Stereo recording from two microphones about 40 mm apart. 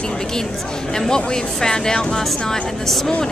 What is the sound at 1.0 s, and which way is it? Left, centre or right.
Speech, centre.